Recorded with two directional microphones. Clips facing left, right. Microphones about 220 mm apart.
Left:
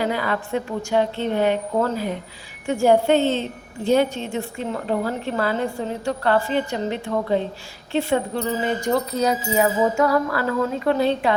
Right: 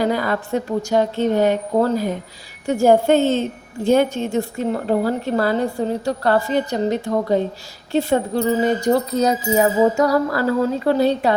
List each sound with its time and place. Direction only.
0.0 s a woman's voice: 40° right (ahead or behind)